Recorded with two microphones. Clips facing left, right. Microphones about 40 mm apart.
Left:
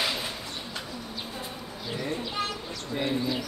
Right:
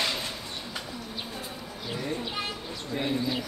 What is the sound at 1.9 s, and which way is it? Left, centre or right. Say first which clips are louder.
A man's voice: left 2 dB; centre.